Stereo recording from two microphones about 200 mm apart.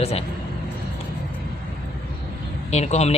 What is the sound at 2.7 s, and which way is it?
Speech, 30° left (ahead or behind).